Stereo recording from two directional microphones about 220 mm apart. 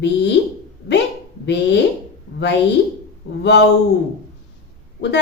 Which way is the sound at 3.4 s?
50° left (ahead or behind).